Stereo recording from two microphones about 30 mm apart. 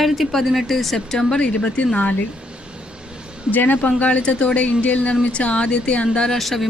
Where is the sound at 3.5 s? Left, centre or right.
Left.